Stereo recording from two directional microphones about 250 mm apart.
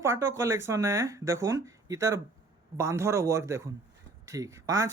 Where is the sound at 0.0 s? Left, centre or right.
Centre.